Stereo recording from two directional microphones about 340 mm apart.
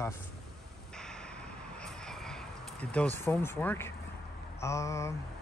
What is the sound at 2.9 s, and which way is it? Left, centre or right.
Speech, centre.